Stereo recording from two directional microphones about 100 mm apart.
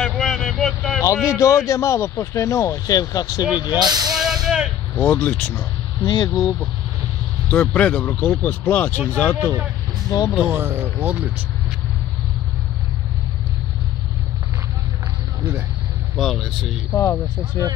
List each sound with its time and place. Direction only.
0.0 s vehicle: centre (ahead or behind)
1.0 s speech: 35° left (ahead or behind)
3.8 s speech: 45° right (ahead or behind)
4.1 s a sound: 5° right (ahead or behind)
4.9 s speech: 15° left (ahead or behind)
6.0 s speech: 50° left (ahead or behind)
7.4 s speech: 10° left (ahead or behind)
10.0 s speech: 40° left (ahead or behind)
10.4 s speech: 20° right (ahead or behind)
16.2 s speech: centre (ahead or behind)
16.9 s speech: 30° left (ahead or behind)